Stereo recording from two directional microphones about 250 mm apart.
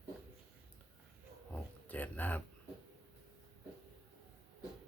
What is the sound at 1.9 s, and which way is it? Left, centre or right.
Speech, centre.